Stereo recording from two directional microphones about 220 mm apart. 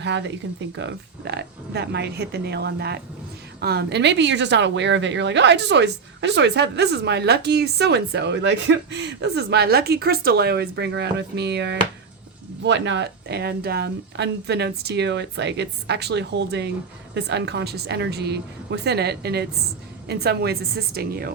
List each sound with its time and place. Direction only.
0.0 s speech: 55° right (ahead or behind)